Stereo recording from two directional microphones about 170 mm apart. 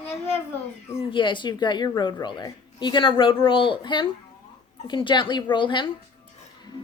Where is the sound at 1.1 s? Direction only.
30° left (ahead or behind).